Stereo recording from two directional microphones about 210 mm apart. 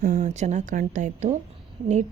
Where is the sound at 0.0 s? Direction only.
35° right (ahead or behind).